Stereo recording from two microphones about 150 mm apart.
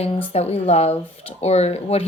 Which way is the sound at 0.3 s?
45° left (ahead or behind).